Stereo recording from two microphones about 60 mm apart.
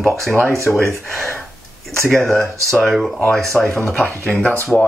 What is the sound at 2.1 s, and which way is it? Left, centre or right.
Speech, centre.